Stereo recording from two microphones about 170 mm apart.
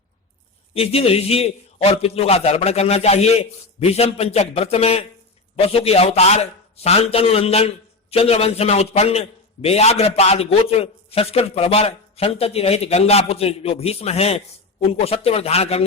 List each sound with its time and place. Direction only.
0.7 s a man's voice: 35° left (ahead or behind)